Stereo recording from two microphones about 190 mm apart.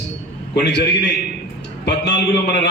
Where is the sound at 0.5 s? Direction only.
60° left (ahead or behind).